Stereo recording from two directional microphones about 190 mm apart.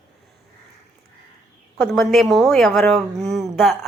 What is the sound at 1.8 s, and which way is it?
Speech, centre (ahead or behind).